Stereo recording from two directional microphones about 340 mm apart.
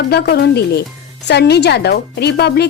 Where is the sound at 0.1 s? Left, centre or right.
Left.